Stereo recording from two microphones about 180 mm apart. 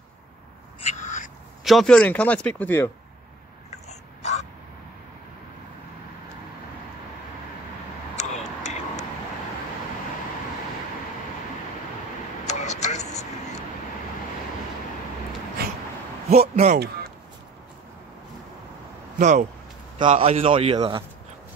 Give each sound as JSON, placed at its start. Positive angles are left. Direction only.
{"t": 0.7, "sound": "owl", "side_deg": 40}
{"t": 1.6, "sound": "speech", "side_deg": 0}
{"t": 3.7, "sound": "crow", "side_deg": 40}
{"t": 8.2, "sound": "tick", "side_deg": 40}
{"t": 12.4, "sound": "vehicle", "side_deg": 40}
{"t": 15.6, "sound": "a sound", "side_deg": -60}
{"t": 16.3, "sound": "a sound", "side_deg": -35}
{"t": 19.1, "sound": "a man's voice", "side_deg": -45}